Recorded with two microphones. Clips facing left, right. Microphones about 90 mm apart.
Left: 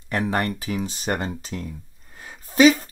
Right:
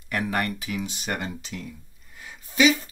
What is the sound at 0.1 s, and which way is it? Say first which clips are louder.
Speech: left 3 dB; 30° left (ahead or behind).